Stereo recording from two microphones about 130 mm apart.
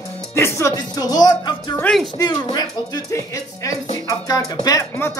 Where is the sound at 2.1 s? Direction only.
30° left (ahead or behind).